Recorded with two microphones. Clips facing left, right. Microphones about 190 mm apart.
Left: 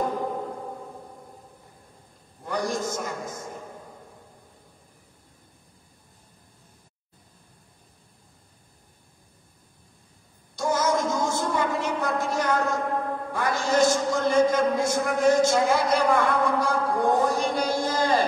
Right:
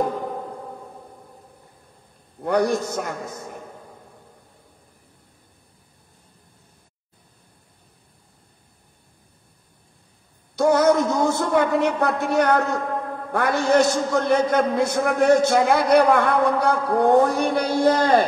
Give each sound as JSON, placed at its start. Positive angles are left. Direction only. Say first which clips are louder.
{"t": 2.4, "sound": "a man's voice", "louder": "right 7 dB", "side_deg": -65}
{"t": 10.5, "sound": "a sound", "louder": "right 8 dB", "side_deg": -65}
{"t": 13.3, "sound": "a man's voice", "louder": "right 7 dB", "side_deg": -65}